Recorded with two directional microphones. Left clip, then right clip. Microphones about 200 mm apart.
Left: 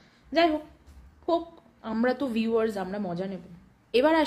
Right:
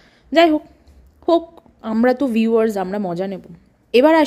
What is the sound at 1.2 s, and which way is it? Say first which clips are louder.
A woman's voice: right 10 dB; 40° right (ahead or behind).